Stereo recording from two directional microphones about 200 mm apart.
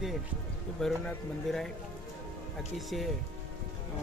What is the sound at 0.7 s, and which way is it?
Speech, centre (ahead or behind).